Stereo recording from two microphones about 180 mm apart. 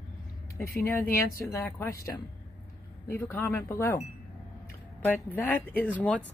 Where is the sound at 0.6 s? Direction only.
5° left (ahead or behind).